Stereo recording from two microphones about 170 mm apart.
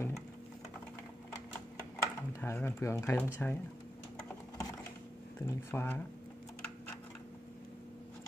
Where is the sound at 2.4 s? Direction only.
15° left (ahead or behind).